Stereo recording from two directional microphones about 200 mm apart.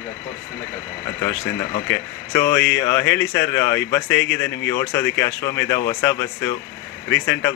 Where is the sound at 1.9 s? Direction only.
15° left (ahead or behind).